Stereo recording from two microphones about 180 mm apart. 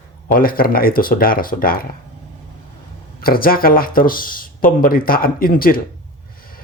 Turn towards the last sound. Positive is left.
turn(degrees=55)  # may be behind; listen again after turning